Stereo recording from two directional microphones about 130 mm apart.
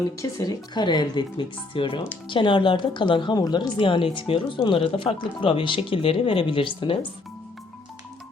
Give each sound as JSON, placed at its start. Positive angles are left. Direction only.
{"t": 0.2, "sound": "a woman's voice", "side_deg": 30}